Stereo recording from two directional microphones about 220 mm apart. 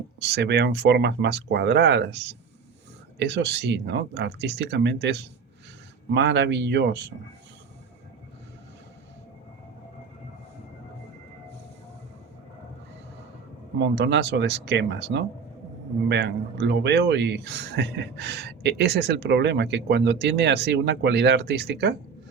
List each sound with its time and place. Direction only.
0.2 s speech: 50° right (ahead or behind)
13.7 s speech: 50° right (ahead or behind)